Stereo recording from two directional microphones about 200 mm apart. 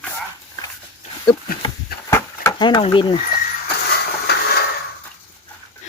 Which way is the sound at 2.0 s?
15° left (ahead or behind).